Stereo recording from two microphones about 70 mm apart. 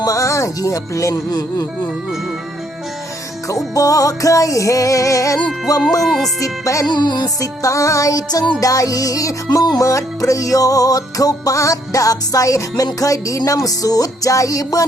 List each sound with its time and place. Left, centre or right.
0.0 s music: left
3.8 s music: left
6.0 s speech: centre
6.4 s music: left
6.9 s music: left
7.6 s music: left
8.6 s music: left